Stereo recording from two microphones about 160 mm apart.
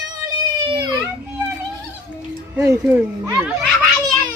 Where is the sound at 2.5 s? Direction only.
15° right (ahead or behind).